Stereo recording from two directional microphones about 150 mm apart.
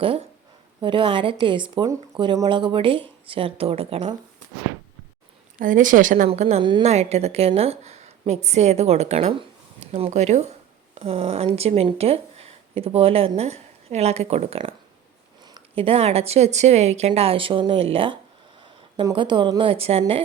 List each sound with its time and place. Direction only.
0.0 s a woman's voice: 40° right (ahead or behind)
5.5 s speech: 60° right (ahead or behind)
6.2 s a woman's voice: 45° right (ahead or behind)
6.6 s a woman's voice: 30° right (ahead or behind)
6.8 s a woman's voice: 45° right (ahead or behind)